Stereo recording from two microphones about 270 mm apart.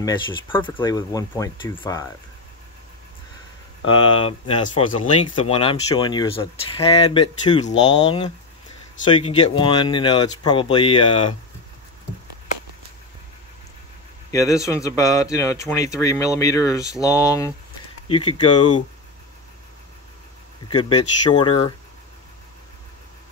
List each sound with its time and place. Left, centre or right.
0.0 s speech: centre
3.8 s speech: centre
14.3 s speech: centre
21.3 s speech: centre